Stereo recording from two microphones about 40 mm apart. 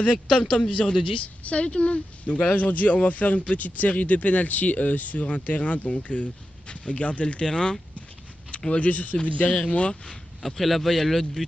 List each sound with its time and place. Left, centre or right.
0.0 s a man's voice: left
8.5 s a sound: centre
8.7 s speech: left
10.4 s speech: centre